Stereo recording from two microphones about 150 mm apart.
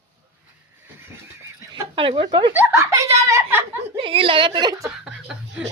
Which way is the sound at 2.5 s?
15° right (ahead or behind).